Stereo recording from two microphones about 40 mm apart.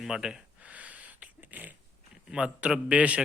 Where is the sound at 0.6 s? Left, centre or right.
Right.